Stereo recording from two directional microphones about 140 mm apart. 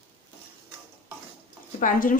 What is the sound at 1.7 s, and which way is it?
Speech, 70° left (ahead or behind).